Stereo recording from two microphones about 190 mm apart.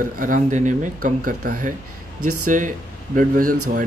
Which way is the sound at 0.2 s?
40° right (ahead or behind).